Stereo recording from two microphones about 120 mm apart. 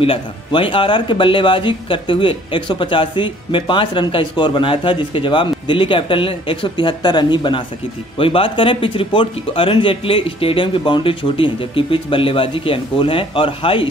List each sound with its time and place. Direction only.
0.0 s speech: 50° left (ahead or behind)